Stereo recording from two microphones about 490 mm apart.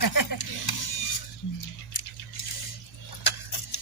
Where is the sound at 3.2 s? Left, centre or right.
Left.